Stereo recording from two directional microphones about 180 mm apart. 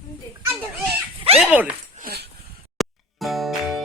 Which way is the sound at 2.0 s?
60° right (ahead or behind).